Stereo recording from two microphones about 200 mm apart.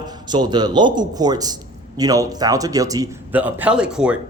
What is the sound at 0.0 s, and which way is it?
A man's voice, 20° right (ahead or behind).